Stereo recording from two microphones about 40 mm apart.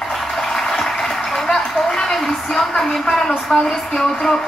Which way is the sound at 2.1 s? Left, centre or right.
Centre.